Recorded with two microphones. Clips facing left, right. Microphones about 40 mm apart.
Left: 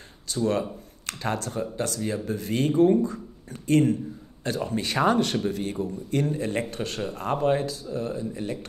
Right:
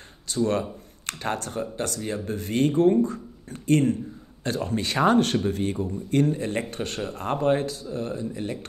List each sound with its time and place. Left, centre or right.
0.4 s speech: right
6.3 s speech: right
6.7 s speech: right